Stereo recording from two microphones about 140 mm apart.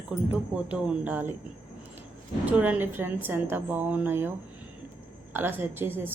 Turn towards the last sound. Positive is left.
turn(degrees=-15)  # may be behind; listen again after turning